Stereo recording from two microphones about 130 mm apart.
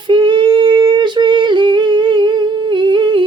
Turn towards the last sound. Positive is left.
turn(degrees=-40)  # may be behind; listen again after turning